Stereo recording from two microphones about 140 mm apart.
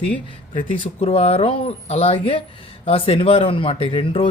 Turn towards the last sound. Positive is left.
turn(degrees=40)  # may be behind; listen again after turning